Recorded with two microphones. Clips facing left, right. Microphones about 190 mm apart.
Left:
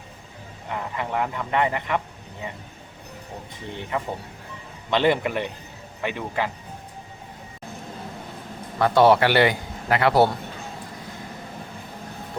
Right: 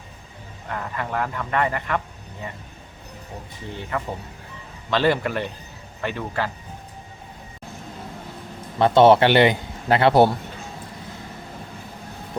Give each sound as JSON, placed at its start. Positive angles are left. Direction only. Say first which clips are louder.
{"t": 0.7, "sound": "speech", "louder": "even", "side_deg": 15}
{"t": 3.8, "sound": "a man's voice", "louder": "even", "side_deg": 15}
{"t": 8.8, "sound": "a man's voice", "louder": "right 3 dB", "side_deg": -25}